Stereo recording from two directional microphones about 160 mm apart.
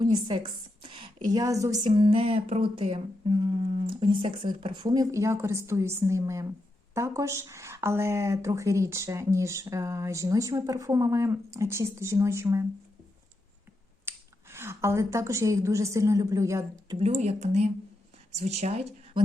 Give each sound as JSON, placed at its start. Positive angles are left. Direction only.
{"t": 0.0, "sound": "a woman's voice", "side_deg": -25}
{"t": 14.1, "sound": "finger snapping", "side_deg": -15}
{"t": 14.5, "sound": "speech", "side_deg": -15}
{"t": 17.0, "sound": "speech", "side_deg": -45}